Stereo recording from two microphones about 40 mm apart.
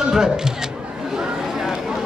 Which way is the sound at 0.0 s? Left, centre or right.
Centre.